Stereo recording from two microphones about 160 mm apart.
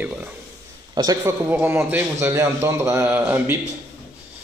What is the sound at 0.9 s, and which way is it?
Speech, 25° right (ahead or behind).